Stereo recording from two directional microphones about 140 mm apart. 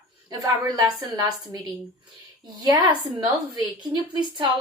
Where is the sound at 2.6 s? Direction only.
30° right (ahead or behind).